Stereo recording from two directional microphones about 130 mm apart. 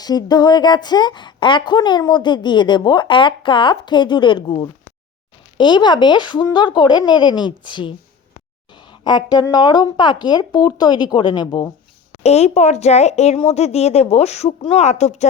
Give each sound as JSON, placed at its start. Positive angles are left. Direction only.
{"t": 0.0, "sound": "a woman's voice", "side_deg": 30}
{"t": 12.1, "sound": "speech", "side_deg": 55}